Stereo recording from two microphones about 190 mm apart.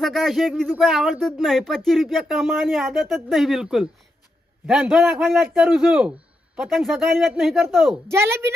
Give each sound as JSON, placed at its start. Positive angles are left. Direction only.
{"t": 0.0, "sound": "speech", "side_deg": 0}
{"t": 8.1, "sound": "a woman's voice", "side_deg": -15}